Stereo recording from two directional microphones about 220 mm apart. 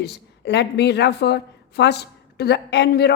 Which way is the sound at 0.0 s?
50° left (ahead or behind).